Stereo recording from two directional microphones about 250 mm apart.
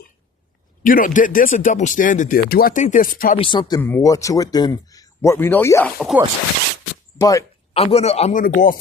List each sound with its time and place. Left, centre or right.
0.8 s speech: left
3.3 s speech: centre
6.0 s speech: centre
7.2 s a sound: centre
7.8 s speech: left